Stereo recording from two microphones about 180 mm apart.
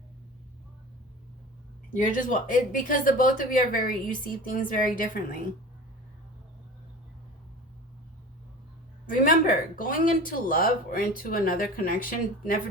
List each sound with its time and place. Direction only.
2.0 s speech: 45° left (ahead or behind)
9.0 s speech: 50° left (ahead or behind)